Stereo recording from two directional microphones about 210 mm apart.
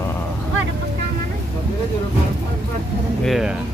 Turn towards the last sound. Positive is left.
turn(degrees=0)  # may be behind; listen again after turning